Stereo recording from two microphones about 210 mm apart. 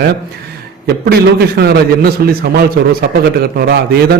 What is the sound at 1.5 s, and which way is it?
A man's voice, 50° right (ahead or behind).